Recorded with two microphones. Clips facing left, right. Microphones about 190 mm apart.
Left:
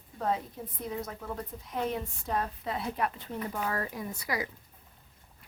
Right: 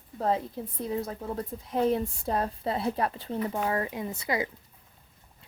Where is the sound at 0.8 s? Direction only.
30° right (ahead or behind).